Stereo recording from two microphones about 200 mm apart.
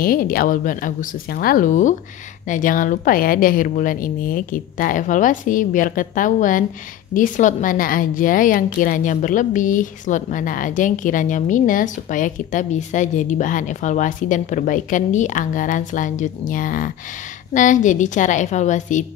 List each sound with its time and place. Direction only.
0.0 s a woman's voice: 45° left (ahead or behind)